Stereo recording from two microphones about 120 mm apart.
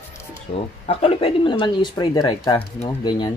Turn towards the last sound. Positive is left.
turn(degrees=40)  # may be behind; listen again after turning